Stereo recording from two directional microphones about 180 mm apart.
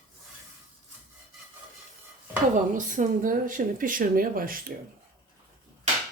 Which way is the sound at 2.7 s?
45° right (ahead or behind).